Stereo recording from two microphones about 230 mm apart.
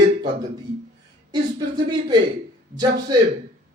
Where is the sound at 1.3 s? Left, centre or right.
Centre.